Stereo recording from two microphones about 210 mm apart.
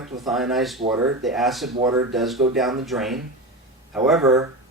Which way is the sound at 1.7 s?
20° right (ahead or behind).